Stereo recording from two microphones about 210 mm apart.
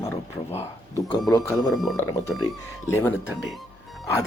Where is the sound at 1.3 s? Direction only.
15° left (ahead or behind).